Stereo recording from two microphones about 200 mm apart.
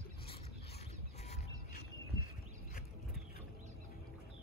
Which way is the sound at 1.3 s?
40° left (ahead or behind).